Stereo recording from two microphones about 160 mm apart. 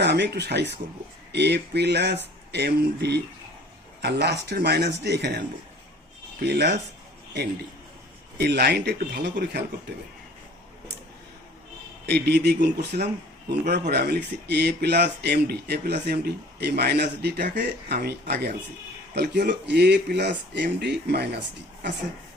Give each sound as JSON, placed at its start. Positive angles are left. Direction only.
{"t": 0.0, "sound": "speech", "side_deg": -90}
{"t": 6.4, "sound": "speech", "side_deg": -90}
{"t": 8.4, "sound": "speech", "side_deg": -90}
{"t": 12.0, "sound": "speech", "side_deg": -90}
{"t": 12.9, "sound": "speech", "side_deg": -55}
{"t": 13.9, "sound": "speech", "side_deg": -90}